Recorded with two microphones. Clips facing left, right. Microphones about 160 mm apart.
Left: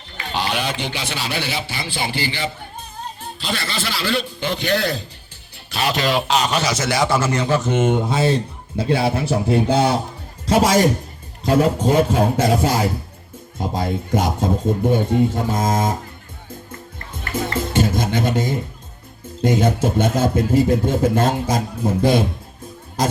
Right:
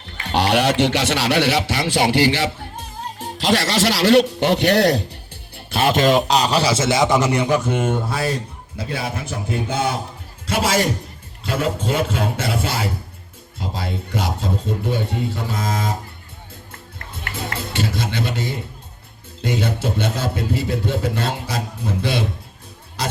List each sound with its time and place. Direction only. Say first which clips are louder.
0.3 s a man's voice: right 6 dB; 70° right (ahead or behind)
5.5 s a man's voice: right 4 dB; 50° right (ahead or behind); by 7.8 s 15° right (ahead or behind)
7.9 s a man's voice: left 4 dB; 20° left (ahead or behind); by 16.0 s 45° left (ahead or behind)
17.3 s music: left 7 dB; 45° left (ahead or behind)
19.4 s speech: left 5 dB; 45° left (ahead or behind)